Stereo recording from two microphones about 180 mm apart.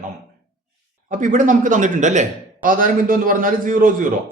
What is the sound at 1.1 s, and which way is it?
A man's voice, 45° right (ahead or behind).